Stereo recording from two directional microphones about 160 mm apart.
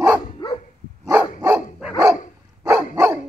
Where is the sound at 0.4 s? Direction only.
30° left (ahead or behind).